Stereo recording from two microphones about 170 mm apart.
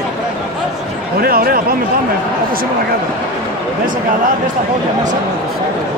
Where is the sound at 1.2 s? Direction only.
60° right (ahead or behind).